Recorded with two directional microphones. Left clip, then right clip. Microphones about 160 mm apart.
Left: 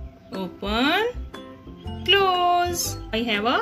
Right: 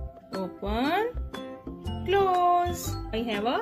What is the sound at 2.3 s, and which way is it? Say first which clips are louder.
Music: left 3 dB; 15° right (ahead or behind).